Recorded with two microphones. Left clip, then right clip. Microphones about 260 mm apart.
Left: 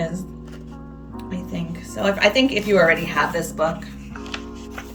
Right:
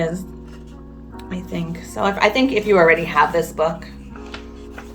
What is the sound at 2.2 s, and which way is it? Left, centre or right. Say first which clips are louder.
Speech: even; right.